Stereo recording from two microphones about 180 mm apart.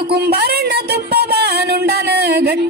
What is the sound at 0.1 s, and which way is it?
Music, 65° right (ahead or behind).